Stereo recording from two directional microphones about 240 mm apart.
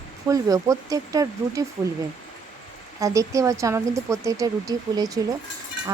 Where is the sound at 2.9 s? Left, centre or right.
Centre.